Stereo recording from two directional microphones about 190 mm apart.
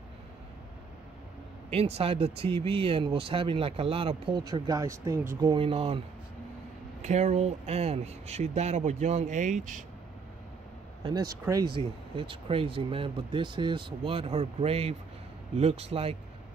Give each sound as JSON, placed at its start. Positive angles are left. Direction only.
{"t": 1.7, "sound": "speech", "side_deg": -30}
{"t": 5.4, "sound": "speech", "side_deg": -25}
{"t": 11.4, "sound": "speech", "side_deg": -20}